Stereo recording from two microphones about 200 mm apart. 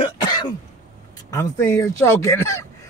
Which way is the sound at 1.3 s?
15° left (ahead or behind).